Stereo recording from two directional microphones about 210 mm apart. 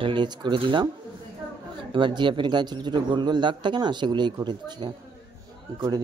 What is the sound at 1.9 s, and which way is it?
A man's voice, 20° right (ahead or behind).